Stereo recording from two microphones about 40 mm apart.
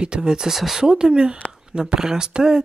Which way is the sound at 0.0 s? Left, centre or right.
Right.